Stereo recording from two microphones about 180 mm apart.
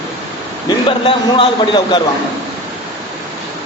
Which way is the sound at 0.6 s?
30° left (ahead or behind).